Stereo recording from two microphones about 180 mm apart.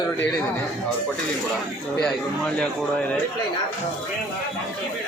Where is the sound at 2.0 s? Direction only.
5° left (ahead or behind).